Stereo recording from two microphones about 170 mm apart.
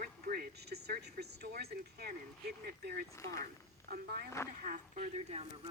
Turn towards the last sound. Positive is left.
turn(degrees=-40)  # may be behind; listen again after turning